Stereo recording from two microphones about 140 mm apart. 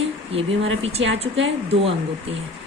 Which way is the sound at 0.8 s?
45° right (ahead or behind).